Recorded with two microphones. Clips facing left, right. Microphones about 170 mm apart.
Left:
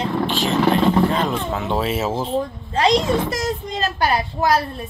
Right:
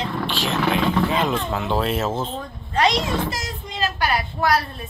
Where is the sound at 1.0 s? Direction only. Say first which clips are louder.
Left 2 dB; 5° right (ahead or behind).